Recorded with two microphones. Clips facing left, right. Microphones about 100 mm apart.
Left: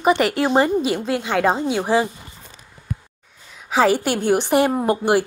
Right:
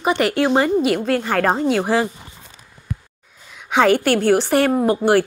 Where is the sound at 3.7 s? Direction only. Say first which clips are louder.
Right 2 dB; 5° left (ahead or behind).